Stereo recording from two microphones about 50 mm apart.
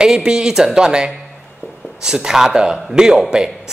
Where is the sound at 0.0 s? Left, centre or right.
Centre.